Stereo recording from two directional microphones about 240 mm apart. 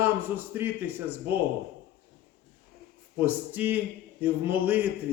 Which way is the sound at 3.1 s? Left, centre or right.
Centre.